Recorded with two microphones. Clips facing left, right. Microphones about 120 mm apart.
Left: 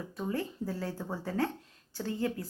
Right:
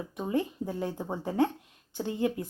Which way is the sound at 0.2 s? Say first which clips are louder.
Right 4 dB; 20° right (ahead or behind).